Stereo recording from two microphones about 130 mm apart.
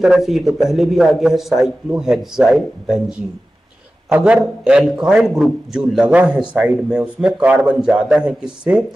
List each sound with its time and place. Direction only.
0.0 s a man's voice: 5° right (ahead or behind)